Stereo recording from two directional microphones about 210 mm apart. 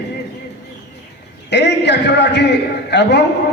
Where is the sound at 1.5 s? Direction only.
55° left (ahead or behind).